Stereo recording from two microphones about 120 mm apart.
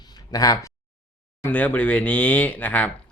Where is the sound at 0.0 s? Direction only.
35° left (ahead or behind).